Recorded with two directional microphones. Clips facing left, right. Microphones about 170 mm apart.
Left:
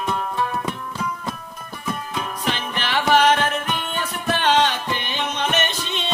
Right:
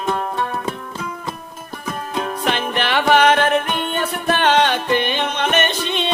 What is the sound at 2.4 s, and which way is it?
Music, 60° right (ahead or behind).